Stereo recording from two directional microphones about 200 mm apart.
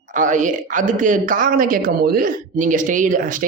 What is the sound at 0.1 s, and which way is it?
Speech, 40° right (ahead or behind).